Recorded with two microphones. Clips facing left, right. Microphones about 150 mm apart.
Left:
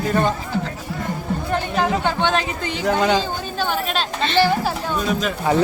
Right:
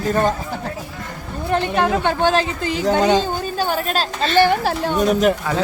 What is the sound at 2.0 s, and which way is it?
Speech, 55° right (ahead or behind).